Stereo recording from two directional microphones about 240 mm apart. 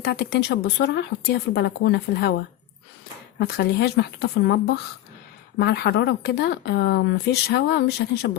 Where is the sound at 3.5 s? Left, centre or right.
Left.